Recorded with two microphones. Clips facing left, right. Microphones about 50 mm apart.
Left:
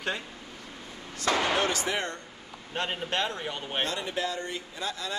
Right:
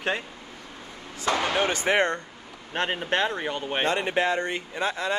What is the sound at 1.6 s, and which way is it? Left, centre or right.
Speech, right.